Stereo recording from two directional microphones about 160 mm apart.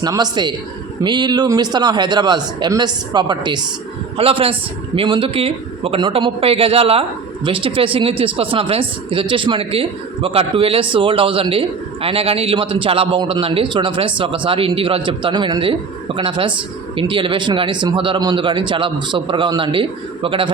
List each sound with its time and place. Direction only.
0.0 s speech: 25° right (ahead or behind)